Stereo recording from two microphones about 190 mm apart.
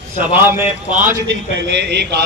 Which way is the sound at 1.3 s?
65° right (ahead or behind).